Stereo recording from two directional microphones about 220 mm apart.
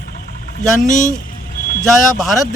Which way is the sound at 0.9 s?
35° left (ahead or behind).